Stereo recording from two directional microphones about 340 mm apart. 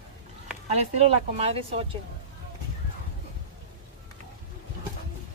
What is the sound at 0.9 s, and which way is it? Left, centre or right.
Speech, centre.